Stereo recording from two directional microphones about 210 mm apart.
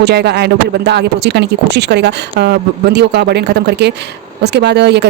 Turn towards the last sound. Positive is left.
turn(degrees=-55)  # may be behind; listen again after turning